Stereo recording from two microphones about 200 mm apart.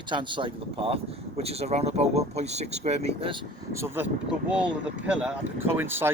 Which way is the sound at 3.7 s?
15° right (ahead or behind).